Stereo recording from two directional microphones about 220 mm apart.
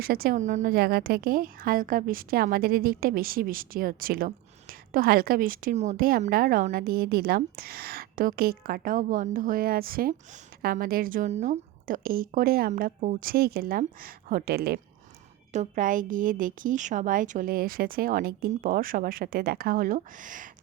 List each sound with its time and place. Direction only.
0.0 s a woman's voice: 45° right (ahead or behind)